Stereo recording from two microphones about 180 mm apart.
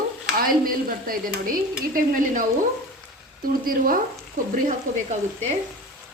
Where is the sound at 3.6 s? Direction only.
55° right (ahead or behind).